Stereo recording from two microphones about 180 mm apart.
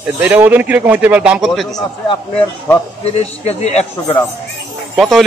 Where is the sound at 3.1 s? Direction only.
35° left (ahead or behind).